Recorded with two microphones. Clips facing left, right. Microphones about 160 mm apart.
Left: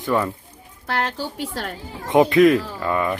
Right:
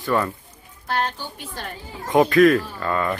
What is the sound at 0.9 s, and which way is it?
Speech, 75° left (ahead or behind).